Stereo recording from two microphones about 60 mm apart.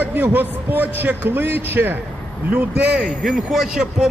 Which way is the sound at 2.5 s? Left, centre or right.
Right.